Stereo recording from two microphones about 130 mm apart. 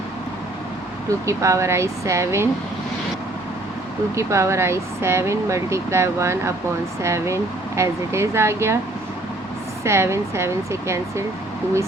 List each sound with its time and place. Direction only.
1.3 s speech: 25° right (ahead or behind)
4.1 s speech: 20° right (ahead or behind)
9.8 s speech: 20° right (ahead or behind)